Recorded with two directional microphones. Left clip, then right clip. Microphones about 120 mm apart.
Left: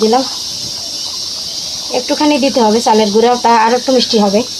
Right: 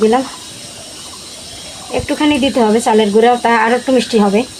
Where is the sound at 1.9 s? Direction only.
40° right (ahead or behind).